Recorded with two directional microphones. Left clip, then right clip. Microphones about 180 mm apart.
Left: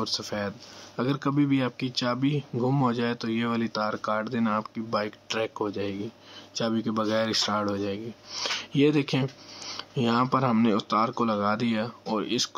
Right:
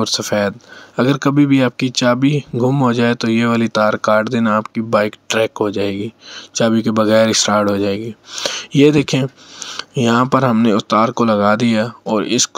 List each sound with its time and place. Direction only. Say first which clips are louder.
0.0 s speech: right 13 dB; 40° right (ahead or behind)
9.8 s a sound: right 11 dB; 35° right (ahead or behind)
10.2 s speech: right 10 dB; 35° right (ahead or behind)